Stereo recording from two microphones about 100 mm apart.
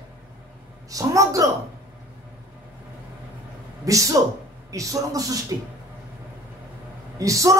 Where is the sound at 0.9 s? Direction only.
35° right (ahead or behind).